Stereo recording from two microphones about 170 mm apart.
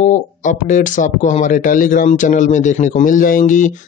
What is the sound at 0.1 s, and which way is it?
Speech, 50° left (ahead or behind).